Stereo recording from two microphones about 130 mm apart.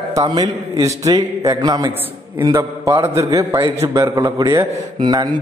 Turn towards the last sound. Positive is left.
turn(degrees=-30)  # may be behind; listen again after turning